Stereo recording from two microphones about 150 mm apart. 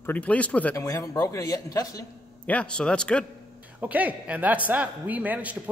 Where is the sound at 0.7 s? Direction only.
20° left (ahead or behind).